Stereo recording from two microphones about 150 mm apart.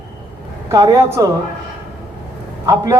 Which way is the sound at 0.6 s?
25° right (ahead or behind).